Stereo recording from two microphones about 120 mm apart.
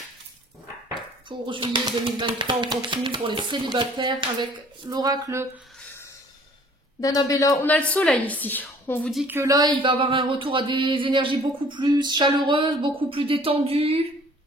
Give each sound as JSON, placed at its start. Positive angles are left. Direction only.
{"t": 1.4, "sound": "speech", "side_deg": -45}
{"t": 7.0, "sound": "a man's voice", "side_deg": 30}
{"t": 7.9, "sound": "a woman's voice", "side_deg": 10}
{"t": 9.5, "sound": "a sound", "side_deg": -35}